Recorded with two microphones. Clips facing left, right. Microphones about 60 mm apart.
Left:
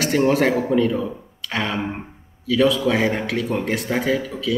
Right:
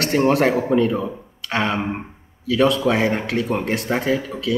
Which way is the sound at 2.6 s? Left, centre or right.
Right.